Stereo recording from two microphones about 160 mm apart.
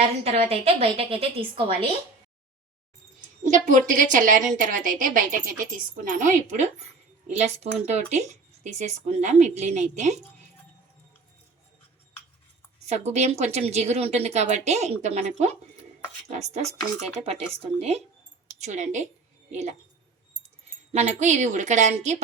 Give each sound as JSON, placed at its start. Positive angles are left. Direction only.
{"t": 0.0, "sound": "a woman's voice", "side_deg": -40}
{"t": 3.4, "sound": "a woman's voice", "side_deg": -50}
{"t": 12.8, "sound": "a woman's voice", "side_deg": -45}
{"t": 20.9, "sound": "speech", "side_deg": -45}